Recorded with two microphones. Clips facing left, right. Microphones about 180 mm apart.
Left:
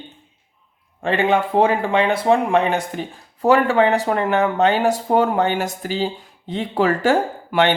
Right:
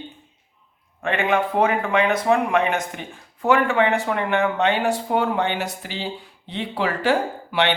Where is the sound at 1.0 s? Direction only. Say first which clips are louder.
Left 3 dB; 30° left (ahead or behind).